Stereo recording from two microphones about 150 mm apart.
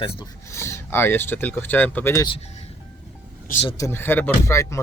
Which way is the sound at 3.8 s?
15° left (ahead or behind).